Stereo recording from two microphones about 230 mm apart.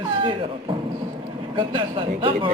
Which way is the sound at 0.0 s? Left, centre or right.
Right.